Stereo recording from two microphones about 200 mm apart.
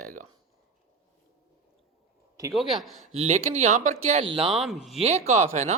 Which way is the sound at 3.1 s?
30° right (ahead or behind).